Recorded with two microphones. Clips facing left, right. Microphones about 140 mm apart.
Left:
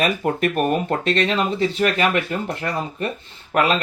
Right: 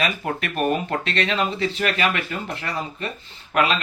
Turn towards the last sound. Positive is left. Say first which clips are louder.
# left 2 dB
turn(degrees=45)  # may be behind; listen again after turning